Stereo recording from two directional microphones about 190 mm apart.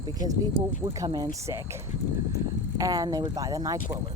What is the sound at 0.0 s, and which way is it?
Speech, 20° right (ahead or behind).